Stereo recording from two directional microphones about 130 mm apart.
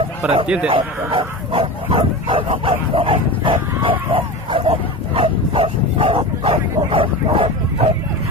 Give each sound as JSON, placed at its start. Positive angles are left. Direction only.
{"t": 0.2, "sound": "speech", "side_deg": -10}
{"t": 0.7, "sound": "speech", "side_deg": -45}
{"t": 4.1, "sound": "bow-wow", "side_deg": -40}